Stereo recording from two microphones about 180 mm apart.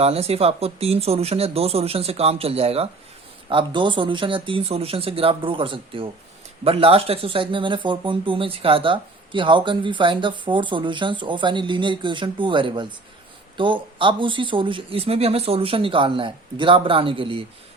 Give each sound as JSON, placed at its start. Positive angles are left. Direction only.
{"t": 0.0, "sound": "speech", "side_deg": -35}